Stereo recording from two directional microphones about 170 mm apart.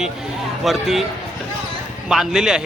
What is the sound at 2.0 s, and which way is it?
Speech, 5° right (ahead or behind).